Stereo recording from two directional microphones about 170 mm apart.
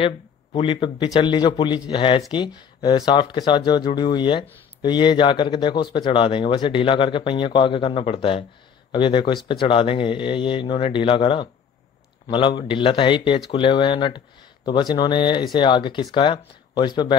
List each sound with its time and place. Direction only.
0.0 s speech: 30° left (ahead or behind)